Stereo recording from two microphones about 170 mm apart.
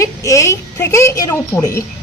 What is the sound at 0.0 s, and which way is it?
A woman's voice, 20° left (ahead or behind).